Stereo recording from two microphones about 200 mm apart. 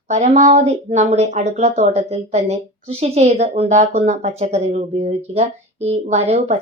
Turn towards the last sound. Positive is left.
turn(degrees=-35)  # may be behind; listen again after turning